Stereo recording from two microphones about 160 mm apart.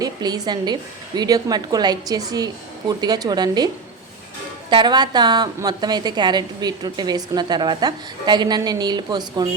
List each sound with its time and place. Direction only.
0.0 s a woman's voice: 25° right (ahead or behind)
4.7 s a woman's voice: 30° right (ahead or behind)